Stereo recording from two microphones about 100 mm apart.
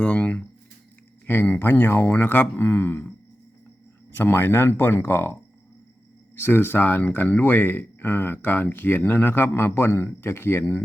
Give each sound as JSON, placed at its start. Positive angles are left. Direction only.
{"t": 0.0, "sound": "a sound", "side_deg": 15}
{"t": 1.3, "sound": "speech", "side_deg": 20}
{"t": 4.1, "sound": "speech", "side_deg": 20}